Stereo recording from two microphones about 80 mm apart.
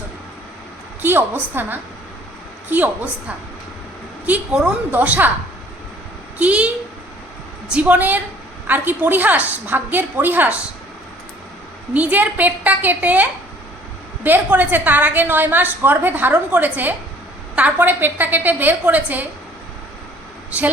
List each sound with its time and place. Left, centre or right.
1.0 s a woman's voice: right
4.5 s a child's voice: centre
4.9 s a woman's voice: right
6.4 s a child's voice: centre
7.7 s a woman's voice: centre
11.9 s a woman's voice: centre
14.3 s a woman's voice: right